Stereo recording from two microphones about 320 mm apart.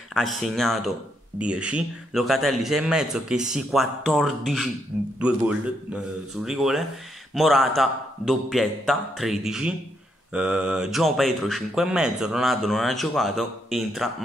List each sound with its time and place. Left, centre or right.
0.1 s speech: centre
6.4 s speech: centre